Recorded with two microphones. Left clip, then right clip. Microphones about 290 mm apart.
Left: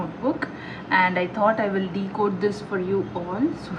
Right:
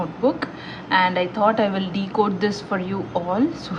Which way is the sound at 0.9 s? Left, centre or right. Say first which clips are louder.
Right 2 dB; centre.